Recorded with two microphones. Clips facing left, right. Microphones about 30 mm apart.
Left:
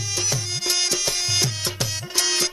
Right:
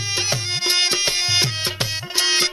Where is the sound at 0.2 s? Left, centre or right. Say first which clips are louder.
Right 3 dB; right.